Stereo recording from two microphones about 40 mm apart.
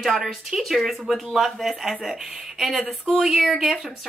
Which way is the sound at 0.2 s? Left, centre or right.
Centre.